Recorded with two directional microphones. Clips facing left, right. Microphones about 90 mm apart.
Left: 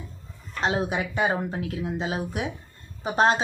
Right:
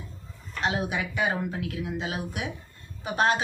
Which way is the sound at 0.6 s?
30° left (ahead or behind).